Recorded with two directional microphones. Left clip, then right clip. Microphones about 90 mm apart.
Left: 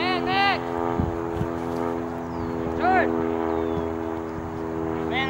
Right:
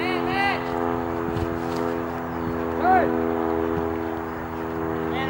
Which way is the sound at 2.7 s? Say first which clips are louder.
Right 2 dB; 30° left (ahead or behind).